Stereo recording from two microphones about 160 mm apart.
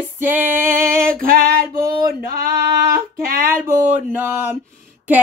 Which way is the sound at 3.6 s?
15° right (ahead or behind).